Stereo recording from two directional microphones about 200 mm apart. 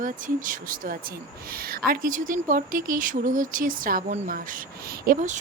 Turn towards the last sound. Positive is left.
turn(degrees=-40)  # may be behind; listen again after turning